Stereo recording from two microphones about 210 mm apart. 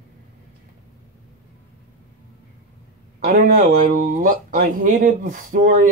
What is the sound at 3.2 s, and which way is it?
Speech, 40° right (ahead or behind).